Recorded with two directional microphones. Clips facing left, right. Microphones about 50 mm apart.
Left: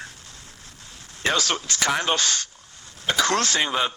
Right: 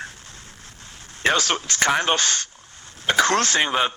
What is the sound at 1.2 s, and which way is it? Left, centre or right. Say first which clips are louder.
A man's voice: right 3 dB; right.